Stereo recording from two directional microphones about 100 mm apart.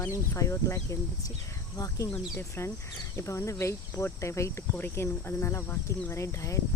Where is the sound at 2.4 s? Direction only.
30° left (ahead or behind).